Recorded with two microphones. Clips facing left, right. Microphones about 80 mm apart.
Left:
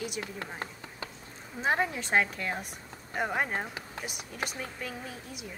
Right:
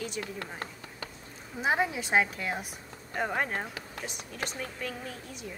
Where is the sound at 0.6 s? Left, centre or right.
Left.